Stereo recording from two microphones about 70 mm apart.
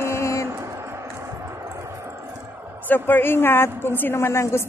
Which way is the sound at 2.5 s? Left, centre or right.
Right.